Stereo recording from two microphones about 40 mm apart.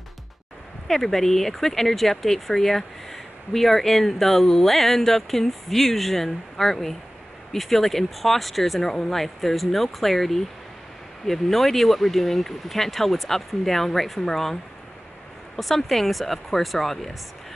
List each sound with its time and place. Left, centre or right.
0.8 s speech: centre
15.6 s speech: centre